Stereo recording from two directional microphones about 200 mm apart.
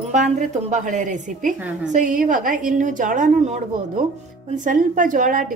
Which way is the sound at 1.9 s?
40° right (ahead or behind).